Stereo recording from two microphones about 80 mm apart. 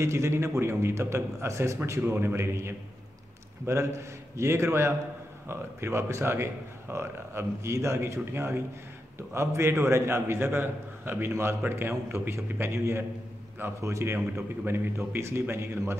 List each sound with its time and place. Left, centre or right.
0.0 s speech: right